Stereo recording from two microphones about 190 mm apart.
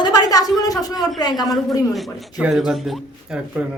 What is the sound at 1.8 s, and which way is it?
Speech, centre (ahead or behind).